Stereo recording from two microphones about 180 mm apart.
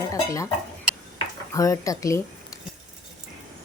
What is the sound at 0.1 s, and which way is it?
Speech, 20° left (ahead or behind).